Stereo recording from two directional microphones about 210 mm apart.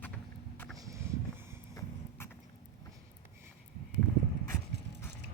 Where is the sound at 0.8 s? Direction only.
15° right (ahead or behind).